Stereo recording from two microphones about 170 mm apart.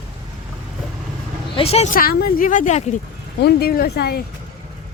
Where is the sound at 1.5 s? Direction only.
35° left (ahead or behind).